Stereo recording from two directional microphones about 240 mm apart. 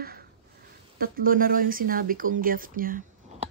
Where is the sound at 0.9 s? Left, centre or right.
Right.